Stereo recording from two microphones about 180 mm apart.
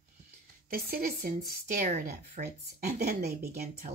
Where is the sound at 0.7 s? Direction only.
55° right (ahead or behind).